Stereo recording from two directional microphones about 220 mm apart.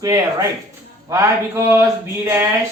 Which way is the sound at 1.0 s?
15° right (ahead or behind).